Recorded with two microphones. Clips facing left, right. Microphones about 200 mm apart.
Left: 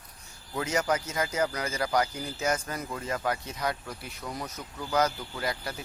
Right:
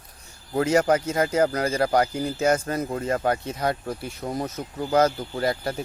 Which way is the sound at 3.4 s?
30° right (ahead or behind).